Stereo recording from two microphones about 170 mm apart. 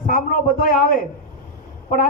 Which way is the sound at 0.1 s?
55° left (ahead or behind).